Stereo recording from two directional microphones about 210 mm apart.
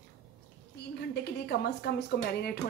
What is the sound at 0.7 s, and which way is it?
Speech, 50° left (ahead or behind).